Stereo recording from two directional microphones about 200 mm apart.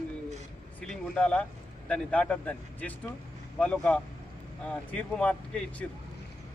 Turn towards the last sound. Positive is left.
turn(degrees=5)  # may be behind; listen again after turning